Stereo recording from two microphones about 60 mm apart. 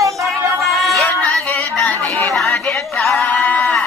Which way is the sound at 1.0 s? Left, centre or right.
Left.